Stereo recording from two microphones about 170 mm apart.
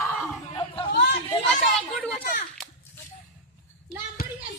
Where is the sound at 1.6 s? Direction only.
5° left (ahead or behind).